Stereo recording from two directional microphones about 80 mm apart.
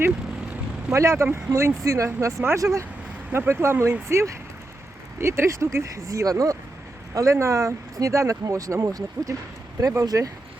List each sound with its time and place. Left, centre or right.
0.9 s speech: right